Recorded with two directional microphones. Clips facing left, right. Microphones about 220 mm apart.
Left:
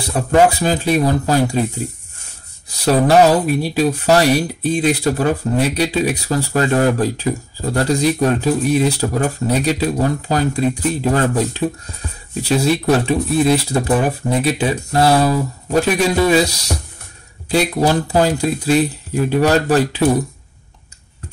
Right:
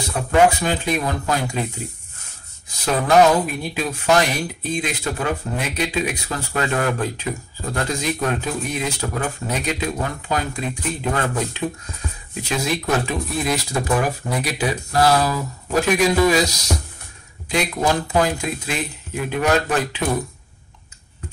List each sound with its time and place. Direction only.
0.3 s speech: 35° left (ahead or behind)
2.8 s speech: 35° left (ahead or behind)